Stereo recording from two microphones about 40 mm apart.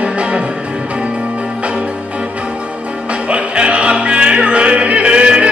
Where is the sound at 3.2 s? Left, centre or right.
Right.